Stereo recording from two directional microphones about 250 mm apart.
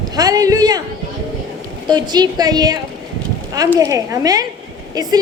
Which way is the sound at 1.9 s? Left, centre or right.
Centre.